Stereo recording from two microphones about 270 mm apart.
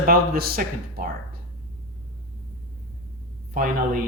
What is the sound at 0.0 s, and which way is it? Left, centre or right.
Speech, right.